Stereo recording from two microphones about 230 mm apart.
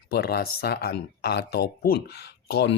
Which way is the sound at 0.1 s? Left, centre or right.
Left.